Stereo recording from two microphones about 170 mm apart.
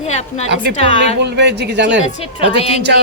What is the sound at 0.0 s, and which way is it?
Speech, 40° left (ahead or behind).